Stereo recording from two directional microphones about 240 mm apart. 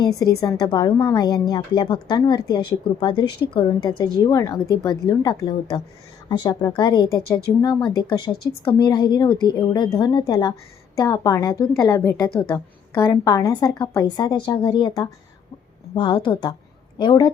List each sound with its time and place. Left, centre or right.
0.6 s a woman's voice: centre